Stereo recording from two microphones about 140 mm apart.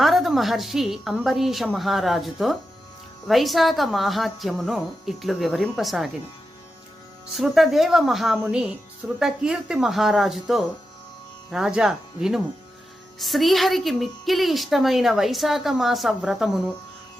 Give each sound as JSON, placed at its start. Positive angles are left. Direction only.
{"t": 0.0, "sound": "a woman's voice", "side_deg": 0}
{"t": 7.3, "sound": "a woman's voice", "side_deg": 0}